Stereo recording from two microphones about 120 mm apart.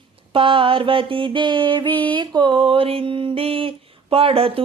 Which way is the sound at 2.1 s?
40° right (ahead or behind).